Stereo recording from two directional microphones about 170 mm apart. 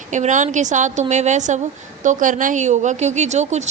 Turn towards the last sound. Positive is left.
turn(degrees=-40)  # may be behind; listen again after turning